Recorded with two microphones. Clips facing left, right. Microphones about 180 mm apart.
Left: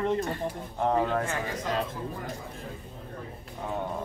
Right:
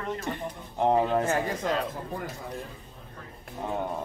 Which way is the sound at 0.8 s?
20° right (ahead or behind).